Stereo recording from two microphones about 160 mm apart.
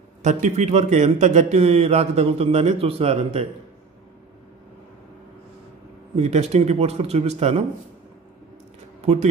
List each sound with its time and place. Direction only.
0.2 s a man's voice: 50° right (ahead or behind)
6.1 s a man's voice: 40° right (ahead or behind)
9.0 s a man's voice: 40° right (ahead or behind)